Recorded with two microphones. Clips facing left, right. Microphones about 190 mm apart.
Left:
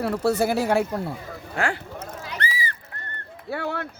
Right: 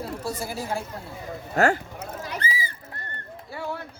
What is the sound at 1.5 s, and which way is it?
Speech, 40° right (ahead or behind).